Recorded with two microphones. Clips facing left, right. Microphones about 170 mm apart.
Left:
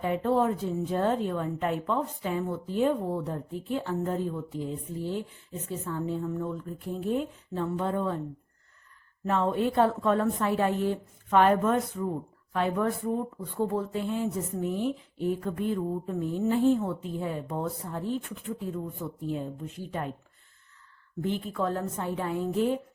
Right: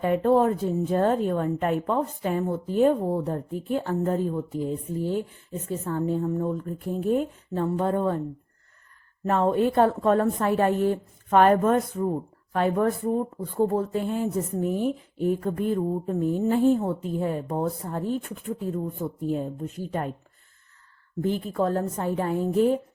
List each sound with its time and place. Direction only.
0.0 s speech: 50° right (ahead or behind)
9.2 s speech: 45° right (ahead or behind)
21.2 s a woman's voice: 40° right (ahead or behind)